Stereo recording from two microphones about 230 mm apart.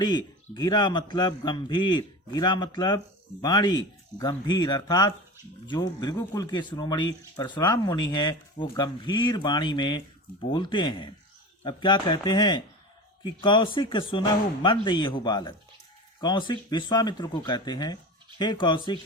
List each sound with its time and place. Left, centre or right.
0.0 s speech: centre